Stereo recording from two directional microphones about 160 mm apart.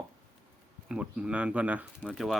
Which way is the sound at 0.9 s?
5° right (ahead or behind).